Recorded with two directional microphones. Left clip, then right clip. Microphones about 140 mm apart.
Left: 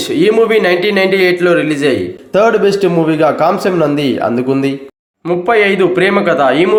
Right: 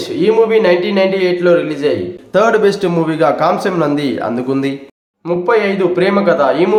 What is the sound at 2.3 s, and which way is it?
Speech, 15° left (ahead or behind).